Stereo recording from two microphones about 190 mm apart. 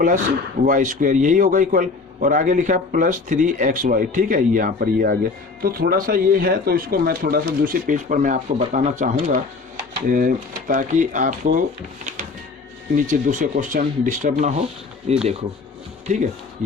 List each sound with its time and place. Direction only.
0.6 s a man's voice: 40° right (ahead or behind)
13.0 s speech: 45° right (ahead or behind)